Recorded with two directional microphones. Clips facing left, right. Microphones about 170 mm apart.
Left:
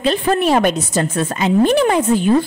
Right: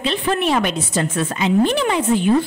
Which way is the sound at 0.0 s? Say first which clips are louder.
Left 4 dB; 40° left (ahead or behind).